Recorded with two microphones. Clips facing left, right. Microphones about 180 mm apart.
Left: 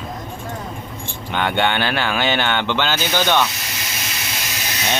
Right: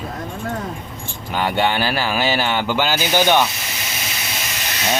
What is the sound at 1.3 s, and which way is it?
Speech, 5° right (ahead or behind).